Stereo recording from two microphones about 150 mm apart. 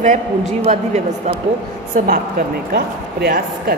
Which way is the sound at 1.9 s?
65° right (ahead or behind).